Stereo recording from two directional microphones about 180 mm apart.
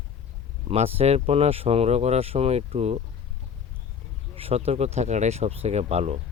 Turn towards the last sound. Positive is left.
turn(degrees=-35)  # may be behind; listen again after turning